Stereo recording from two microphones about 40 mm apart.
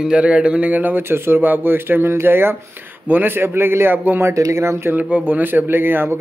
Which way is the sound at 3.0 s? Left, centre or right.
Right.